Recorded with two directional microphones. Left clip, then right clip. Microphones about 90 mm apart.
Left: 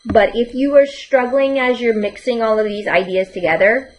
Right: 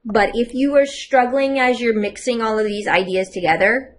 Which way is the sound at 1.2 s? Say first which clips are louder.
Left 2 dB; 40° right (ahead or behind).